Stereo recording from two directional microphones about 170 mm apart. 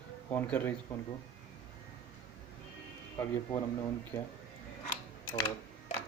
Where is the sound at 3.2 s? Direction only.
15° left (ahead or behind).